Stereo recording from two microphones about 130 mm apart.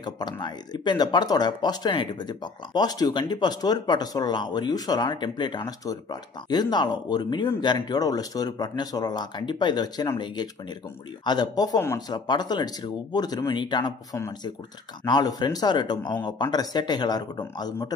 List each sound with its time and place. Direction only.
0.0 s speech: 35° left (ahead or behind)
15.0 s speech: 35° left (ahead or behind)